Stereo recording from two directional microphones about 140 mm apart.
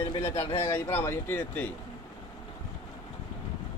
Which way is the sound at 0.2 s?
20° left (ahead or behind).